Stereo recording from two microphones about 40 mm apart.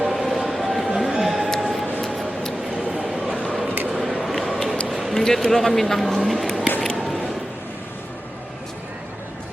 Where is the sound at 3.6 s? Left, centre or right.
Right.